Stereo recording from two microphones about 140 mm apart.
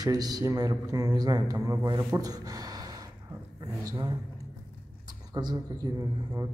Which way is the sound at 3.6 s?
25° right (ahead or behind).